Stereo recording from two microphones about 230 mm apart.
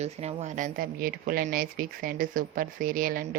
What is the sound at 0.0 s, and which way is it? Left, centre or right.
Speech, right.